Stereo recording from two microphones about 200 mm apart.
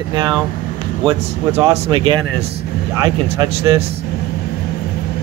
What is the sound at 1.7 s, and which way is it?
Speech, 30° right (ahead or behind).